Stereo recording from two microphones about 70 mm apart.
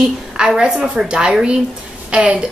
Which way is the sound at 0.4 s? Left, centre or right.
Centre.